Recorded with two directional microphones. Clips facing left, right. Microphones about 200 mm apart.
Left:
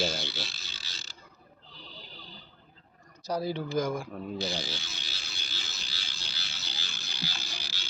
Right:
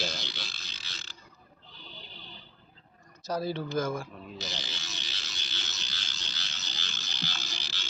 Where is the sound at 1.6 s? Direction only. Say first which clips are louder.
Even; 35° left (ahead or behind).